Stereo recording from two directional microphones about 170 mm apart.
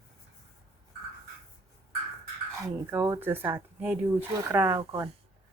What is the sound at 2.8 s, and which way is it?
Speech, 15° right (ahead or behind).